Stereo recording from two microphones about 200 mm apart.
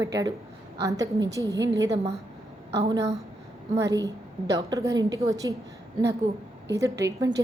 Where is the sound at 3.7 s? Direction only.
15° right (ahead or behind).